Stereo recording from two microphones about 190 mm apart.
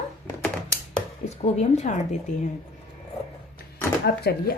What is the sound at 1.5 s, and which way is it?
Speech, 35° left (ahead or behind).